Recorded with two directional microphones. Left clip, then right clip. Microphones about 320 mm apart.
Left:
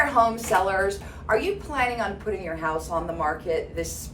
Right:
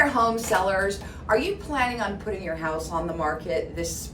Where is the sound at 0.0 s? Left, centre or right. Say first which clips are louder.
Left 1 dB; centre.